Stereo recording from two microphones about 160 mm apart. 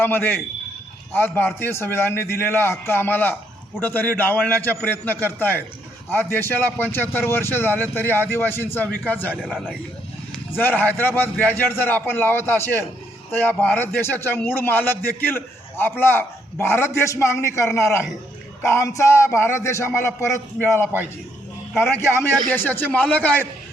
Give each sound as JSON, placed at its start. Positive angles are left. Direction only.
{"t": 0.0, "sound": "a man's voice", "side_deg": 15}
{"t": 9.3, "sound": "a man's voice", "side_deg": -5}
{"t": 10.6, "sound": "a man's voice", "side_deg": 10}